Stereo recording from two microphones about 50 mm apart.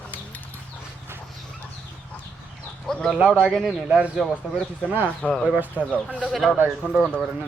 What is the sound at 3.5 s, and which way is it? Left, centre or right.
Speech, centre.